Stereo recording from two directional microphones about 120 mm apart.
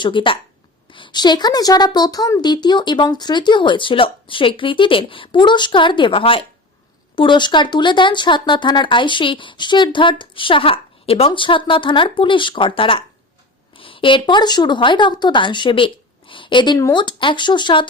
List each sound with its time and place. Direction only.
0.0 s speech: 45° left (ahead or behind)